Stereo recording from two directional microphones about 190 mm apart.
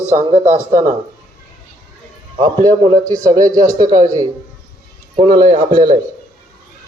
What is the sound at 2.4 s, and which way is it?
A man's voice, 20° right (ahead or behind).